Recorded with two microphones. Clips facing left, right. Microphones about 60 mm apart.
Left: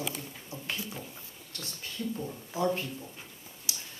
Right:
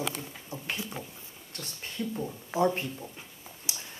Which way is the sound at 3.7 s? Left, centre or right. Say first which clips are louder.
Even; right.